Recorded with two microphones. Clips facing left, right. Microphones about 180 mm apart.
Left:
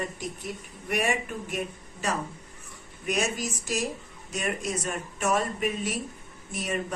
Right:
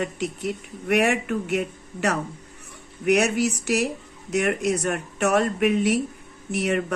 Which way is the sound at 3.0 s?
70° right (ahead or behind).